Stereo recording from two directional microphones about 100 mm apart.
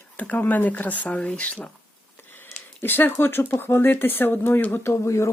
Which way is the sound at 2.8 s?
20° left (ahead or behind).